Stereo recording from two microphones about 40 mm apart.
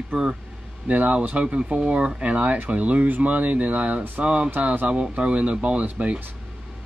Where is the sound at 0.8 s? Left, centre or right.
Right.